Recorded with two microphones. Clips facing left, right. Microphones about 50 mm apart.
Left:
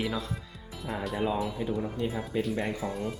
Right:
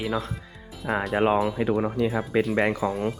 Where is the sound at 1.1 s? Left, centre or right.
Right.